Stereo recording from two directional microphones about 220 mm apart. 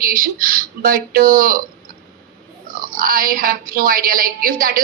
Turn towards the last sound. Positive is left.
turn(degrees=-40)  # may be behind; listen again after turning